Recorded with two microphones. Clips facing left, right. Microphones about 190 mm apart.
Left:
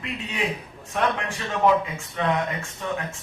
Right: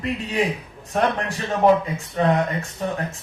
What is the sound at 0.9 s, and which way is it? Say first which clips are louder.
Speech: right 3 dB; 40° right (ahead or behind).